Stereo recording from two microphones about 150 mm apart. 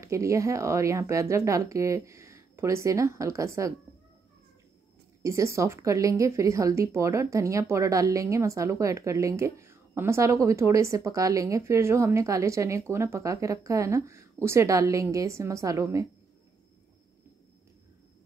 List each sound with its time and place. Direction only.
0.0 s a woman's voice: 20° right (ahead or behind)
5.2 s a woman's voice: 20° right (ahead or behind)